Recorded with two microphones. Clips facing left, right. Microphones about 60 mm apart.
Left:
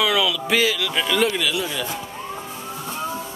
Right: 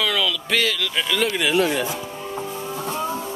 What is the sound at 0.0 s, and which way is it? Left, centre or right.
Speech, centre.